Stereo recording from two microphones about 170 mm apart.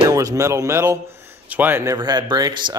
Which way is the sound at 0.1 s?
20° right (ahead or behind).